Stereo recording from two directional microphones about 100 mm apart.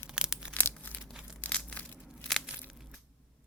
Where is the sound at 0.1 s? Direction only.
5° right (ahead or behind).